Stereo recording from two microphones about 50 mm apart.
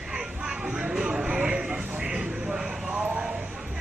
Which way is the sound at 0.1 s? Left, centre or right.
Centre.